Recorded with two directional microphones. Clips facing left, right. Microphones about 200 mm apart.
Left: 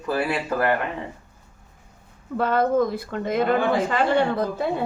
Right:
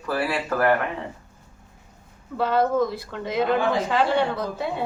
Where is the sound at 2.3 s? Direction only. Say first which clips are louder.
Left 1 dB; 50° left (ahead or behind).